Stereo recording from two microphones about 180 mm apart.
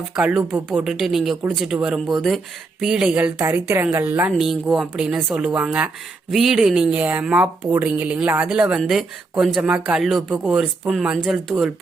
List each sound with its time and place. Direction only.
0.2 s a woman's voice: 5° right (ahead or behind)